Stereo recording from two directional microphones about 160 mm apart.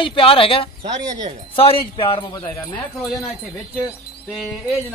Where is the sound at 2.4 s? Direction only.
10° left (ahead or behind).